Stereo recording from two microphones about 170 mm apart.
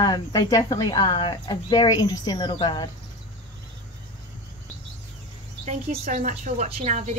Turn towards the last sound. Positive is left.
turn(degrees=-40)  # may be behind; listen again after turning